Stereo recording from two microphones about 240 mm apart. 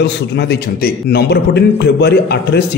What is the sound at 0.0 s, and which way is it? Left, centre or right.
A man's voice, left.